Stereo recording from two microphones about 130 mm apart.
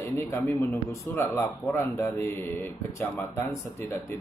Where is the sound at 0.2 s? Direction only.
15° left (ahead or behind).